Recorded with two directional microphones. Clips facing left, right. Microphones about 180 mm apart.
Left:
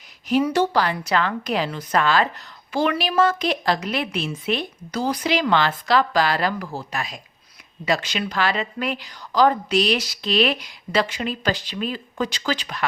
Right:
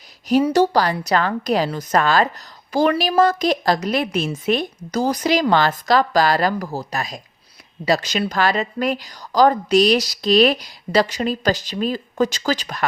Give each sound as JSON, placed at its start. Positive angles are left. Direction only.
{"t": 0.3, "sound": "a woman's voice", "side_deg": -40}